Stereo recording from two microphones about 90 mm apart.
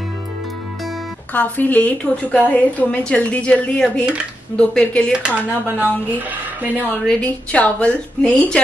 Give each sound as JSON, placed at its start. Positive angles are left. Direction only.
{"t": 1.3, "sound": "a woman's voice", "side_deg": 20}
{"t": 5.2, "sound": "a woman's voice", "side_deg": -15}
{"t": 7.2, "sound": "a woman's voice", "side_deg": 15}